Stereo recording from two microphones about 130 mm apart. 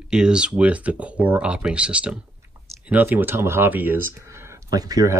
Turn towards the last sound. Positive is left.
turn(degrees=-30)  # may be behind; listen again after turning